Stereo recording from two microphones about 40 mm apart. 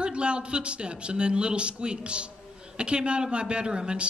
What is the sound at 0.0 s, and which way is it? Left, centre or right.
A man's voice, right.